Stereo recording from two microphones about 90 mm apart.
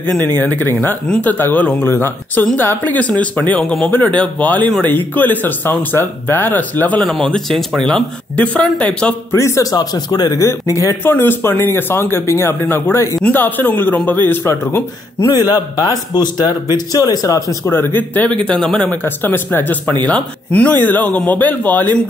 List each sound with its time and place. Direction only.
0.2 s speech: 20° left (ahead or behind)
7.1 s speech: 5° left (ahead or behind)
9.3 s speech: 30° left (ahead or behind); by 10.4 s 50° left (ahead or behind)
10.4 s speech: 35° left (ahead or behind)
11.1 s speech: 25° left (ahead or behind)
12.9 s speech: 35° left (ahead or behind)
13.2 s speech: 20° left (ahead or behind)
15.3 s speech: 45° left (ahead or behind)
17.6 s speech: 25° left (ahead or behind); by 18.9 s 5° left (ahead or behind)
18.9 s speech: 20° left (ahead or behind)